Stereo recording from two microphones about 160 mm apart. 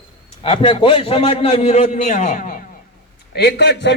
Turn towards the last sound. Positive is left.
turn(degrees=90)